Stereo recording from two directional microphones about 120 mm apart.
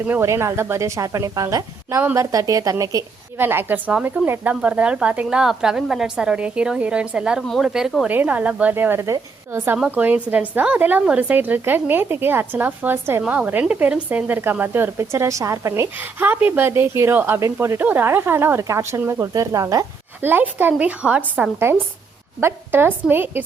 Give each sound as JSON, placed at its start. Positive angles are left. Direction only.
{"t": 0.0, "sound": "speech", "side_deg": -20}
{"t": 3.3, "sound": "speech", "side_deg": -20}
{"t": 20.2, "sound": "speech", "side_deg": -15}